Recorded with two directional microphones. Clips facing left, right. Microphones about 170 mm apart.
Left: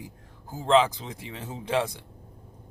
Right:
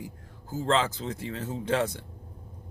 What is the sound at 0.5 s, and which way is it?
Speech, 15° left (ahead or behind).